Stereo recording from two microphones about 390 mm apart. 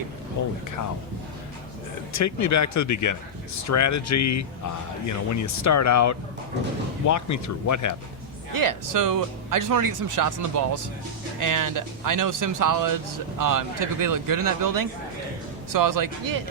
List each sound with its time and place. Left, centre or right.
2.1 s speech: left
8.5 s speech: right